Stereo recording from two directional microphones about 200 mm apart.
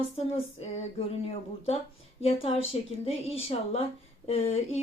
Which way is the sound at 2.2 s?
30° left (ahead or behind).